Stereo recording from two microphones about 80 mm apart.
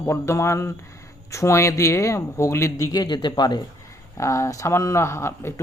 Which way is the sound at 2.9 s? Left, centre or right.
Left.